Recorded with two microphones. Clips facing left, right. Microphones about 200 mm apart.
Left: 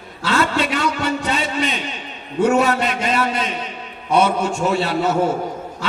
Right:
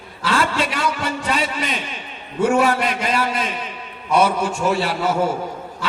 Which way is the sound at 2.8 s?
25° left (ahead or behind).